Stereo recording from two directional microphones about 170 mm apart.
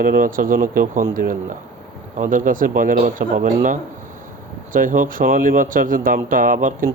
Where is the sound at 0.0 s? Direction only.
55° right (ahead or behind).